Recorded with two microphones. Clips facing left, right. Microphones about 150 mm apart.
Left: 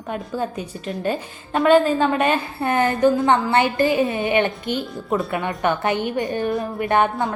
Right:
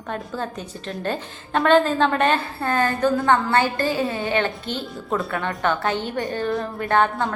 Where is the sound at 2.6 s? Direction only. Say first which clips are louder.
Left 3 dB; 20° left (ahead or behind).